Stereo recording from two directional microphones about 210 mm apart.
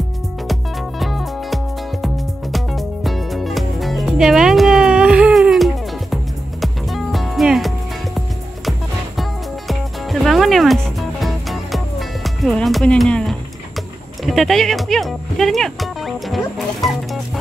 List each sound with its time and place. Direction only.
0.5 s music: centre (ahead or behind)